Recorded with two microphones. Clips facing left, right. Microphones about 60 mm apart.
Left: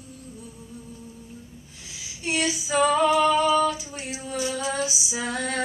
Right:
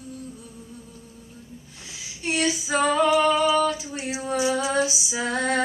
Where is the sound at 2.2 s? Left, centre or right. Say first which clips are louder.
Right 2 dB; right.